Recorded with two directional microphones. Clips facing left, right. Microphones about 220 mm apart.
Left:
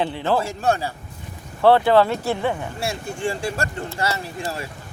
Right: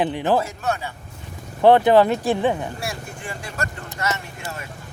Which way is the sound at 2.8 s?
30° left (ahead or behind).